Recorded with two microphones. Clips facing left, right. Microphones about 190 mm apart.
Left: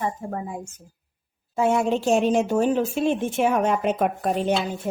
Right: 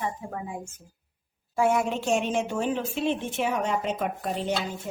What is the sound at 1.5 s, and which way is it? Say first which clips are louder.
A woman's voice: left 3 dB; 25° left (ahead or behind).